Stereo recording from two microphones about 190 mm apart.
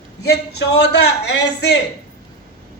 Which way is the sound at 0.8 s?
60° left (ahead or behind).